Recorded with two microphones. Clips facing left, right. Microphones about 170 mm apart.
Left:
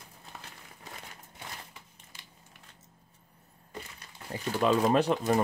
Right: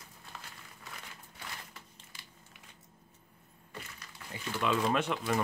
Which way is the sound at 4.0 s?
40° left (ahead or behind).